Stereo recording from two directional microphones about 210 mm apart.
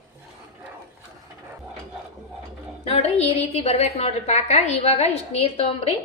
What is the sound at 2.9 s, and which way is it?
A woman's voice, 30° left (ahead or behind).